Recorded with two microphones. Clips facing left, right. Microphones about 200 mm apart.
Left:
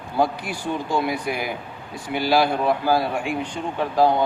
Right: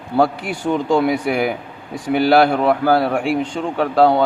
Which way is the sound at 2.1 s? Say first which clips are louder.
Right 6 dB; 60° right (ahead or behind).